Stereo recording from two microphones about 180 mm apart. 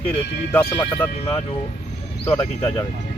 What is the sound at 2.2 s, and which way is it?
Speech, 30° left (ahead or behind).